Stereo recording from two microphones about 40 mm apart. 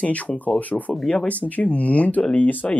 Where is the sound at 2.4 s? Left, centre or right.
Left.